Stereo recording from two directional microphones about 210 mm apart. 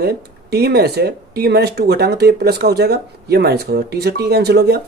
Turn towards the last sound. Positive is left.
turn(degrees=-50)  # may be behind; listen again after turning